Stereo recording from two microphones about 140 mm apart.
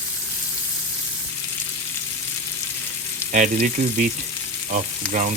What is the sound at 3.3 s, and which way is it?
Speech, 70° right (ahead or behind).